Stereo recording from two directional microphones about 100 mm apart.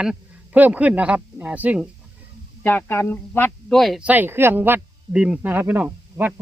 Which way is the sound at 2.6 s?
20° left (ahead or behind).